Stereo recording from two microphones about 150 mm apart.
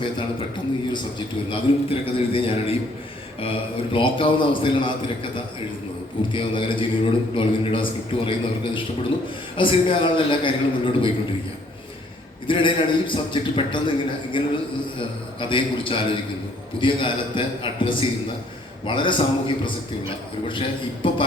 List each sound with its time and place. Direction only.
1.5 s a man's voice: 40° left (ahead or behind)
6.3 s a man's voice: 35° left (ahead or behind)
12.5 s a man's voice: 35° left (ahead or behind)